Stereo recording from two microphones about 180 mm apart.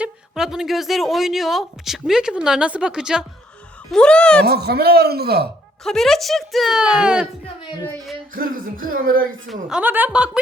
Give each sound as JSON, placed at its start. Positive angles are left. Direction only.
{"t": 0.0, "sound": "a woman's voice", "side_deg": -5}
{"t": 4.4, "sound": "a man's voice", "side_deg": -60}
{"t": 5.8, "sound": "a woman's voice", "side_deg": 0}
{"t": 8.4, "sound": "speech", "side_deg": -50}
{"t": 9.5, "sound": "a woman's voice", "side_deg": -5}